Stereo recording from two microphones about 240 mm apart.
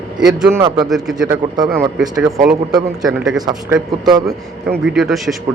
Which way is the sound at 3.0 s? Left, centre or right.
Centre.